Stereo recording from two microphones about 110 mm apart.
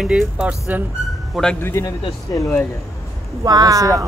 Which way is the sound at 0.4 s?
15° right (ahead or behind).